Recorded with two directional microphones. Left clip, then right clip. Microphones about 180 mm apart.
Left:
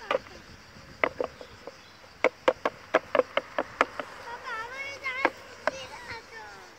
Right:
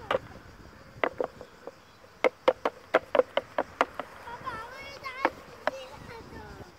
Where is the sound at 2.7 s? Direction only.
25° right (ahead or behind).